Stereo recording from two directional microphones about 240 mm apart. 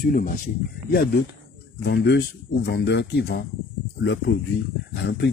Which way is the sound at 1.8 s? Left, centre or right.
Left.